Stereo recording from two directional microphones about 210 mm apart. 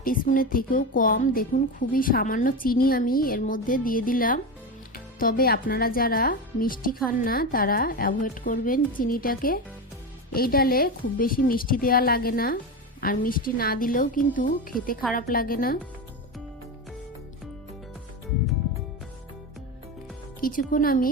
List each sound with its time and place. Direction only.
0.0 s a woman's voice: 40° left (ahead or behind)
20.4 s a woman's voice: 40° left (ahead or behind)